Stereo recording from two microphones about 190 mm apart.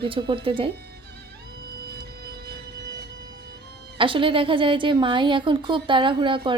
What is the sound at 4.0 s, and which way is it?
A woman's voice, 25° right (ahead or behind).